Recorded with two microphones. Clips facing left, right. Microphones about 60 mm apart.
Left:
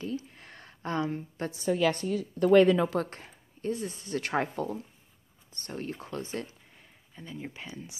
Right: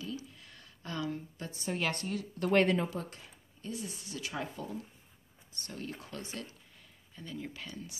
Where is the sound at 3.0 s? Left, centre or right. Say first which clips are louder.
Left 4 dB; left.